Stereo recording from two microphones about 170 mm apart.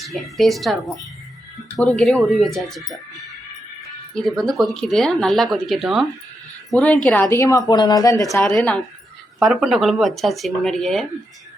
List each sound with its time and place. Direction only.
0.0 s speech: centre (ahead or behind)
4.1 s a woman's voice: centre (ahead or behind); by 8.4 s 20° left (ahead or behind)
8.4 s speech: 5° left (ahead or behind)